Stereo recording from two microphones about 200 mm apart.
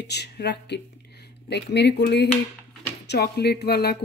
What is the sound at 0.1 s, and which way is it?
Speech, 55° left (ahead or behind).